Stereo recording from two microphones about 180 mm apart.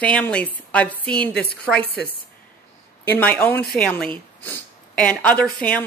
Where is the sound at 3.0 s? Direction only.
10° left (ahead or behind).